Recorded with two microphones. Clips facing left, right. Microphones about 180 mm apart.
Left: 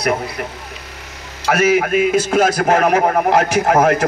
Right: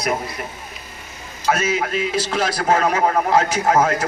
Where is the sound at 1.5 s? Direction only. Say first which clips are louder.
Left 6 dB; 65° left (ahead or behind).